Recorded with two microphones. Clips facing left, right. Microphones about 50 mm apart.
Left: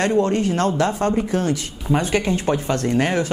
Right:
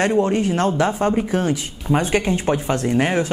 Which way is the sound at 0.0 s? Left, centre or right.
Centre.